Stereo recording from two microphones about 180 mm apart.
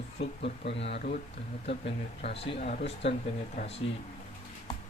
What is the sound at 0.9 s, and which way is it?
Speech, 55° left (ahead or behind).